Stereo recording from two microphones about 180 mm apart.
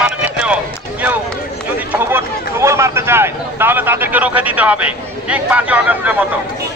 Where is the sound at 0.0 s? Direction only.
5° right (ahead or behind).